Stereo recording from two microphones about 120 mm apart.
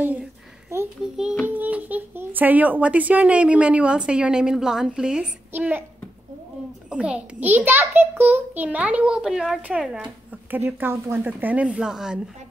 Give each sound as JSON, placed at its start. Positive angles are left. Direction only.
{"t": 1.0, "sound": "a child's voice", "side_deg": -5}
{"t": 6.9, "sound": "a child's voice", "side_deg": -10}